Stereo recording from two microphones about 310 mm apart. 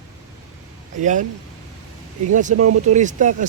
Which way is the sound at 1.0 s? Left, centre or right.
Right.